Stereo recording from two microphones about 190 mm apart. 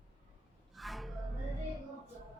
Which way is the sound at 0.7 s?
Centre (ahead or behind).